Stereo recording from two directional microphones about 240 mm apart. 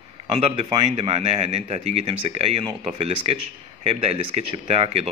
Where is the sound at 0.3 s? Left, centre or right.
Right.